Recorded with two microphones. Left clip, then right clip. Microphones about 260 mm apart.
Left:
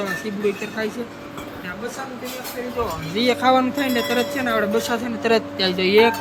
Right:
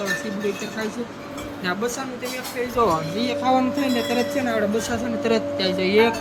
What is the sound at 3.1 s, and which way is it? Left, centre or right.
Speech, centre.